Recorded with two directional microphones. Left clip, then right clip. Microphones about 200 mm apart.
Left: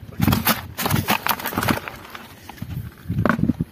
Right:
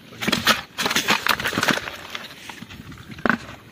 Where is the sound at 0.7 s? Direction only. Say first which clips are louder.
Right 2 dB; 55° left (ahead or behind).